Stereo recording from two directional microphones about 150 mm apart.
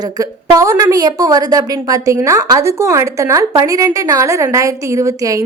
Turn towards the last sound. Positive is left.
turn(degrees=-20)  # may be behind; listen again after turning